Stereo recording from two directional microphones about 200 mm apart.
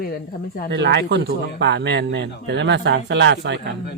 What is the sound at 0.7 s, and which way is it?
Speech, 60° right (ahead or behind).